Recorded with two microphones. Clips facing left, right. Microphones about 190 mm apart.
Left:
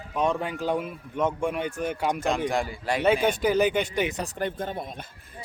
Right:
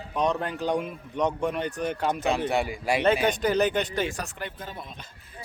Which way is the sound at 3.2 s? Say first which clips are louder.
Left 1 dB; 10° left (ahead or behind).